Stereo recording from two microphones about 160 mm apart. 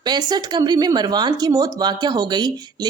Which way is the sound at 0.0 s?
25° right (ahead or behind).